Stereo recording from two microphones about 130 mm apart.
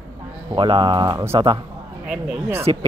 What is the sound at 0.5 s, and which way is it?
Speech, 40° right (ahead or behind).